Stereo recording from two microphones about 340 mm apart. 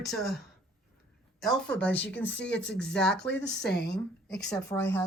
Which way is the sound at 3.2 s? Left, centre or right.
Left.